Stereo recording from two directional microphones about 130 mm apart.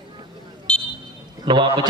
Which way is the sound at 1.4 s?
35° right (ahead or behind).